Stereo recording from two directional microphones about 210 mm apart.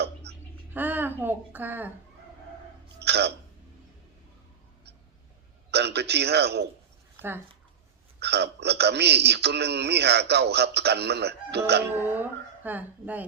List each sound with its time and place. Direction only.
0.3 s a sound: 50° right (ahead or behind)
0.7 s a woman's voice: 10° right (ahead or behind)
3.0 s hiccup: 50° right (ahead or behind)
5.7 s a man's voice: 50° right (ahead or behind)
7.2 s speech: 10° right (ahead or behind)
8.2 s a man's voice: 50° right (ahead or behind)
12.6 s speech: 10° right (ahead or behind)